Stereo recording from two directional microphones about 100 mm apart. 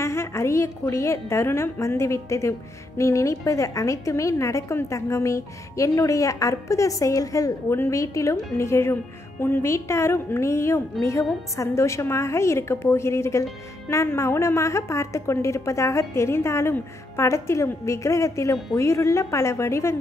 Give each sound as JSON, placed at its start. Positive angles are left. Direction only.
{"t": 0.0, "sound": "a woman's voice", "side_deg": 25}